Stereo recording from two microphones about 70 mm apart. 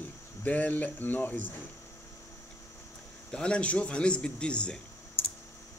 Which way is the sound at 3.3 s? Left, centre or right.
Centre.